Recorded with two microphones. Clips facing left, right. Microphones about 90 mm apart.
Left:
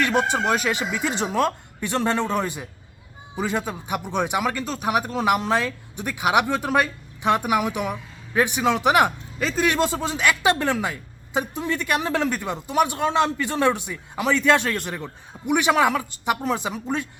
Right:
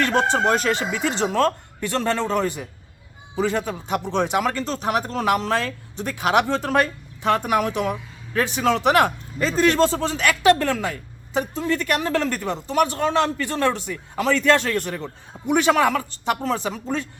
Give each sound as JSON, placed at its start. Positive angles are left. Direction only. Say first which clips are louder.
{"t": 0.0, "sound": "speech", "louder": "right 2 dB", "side_deg": 10}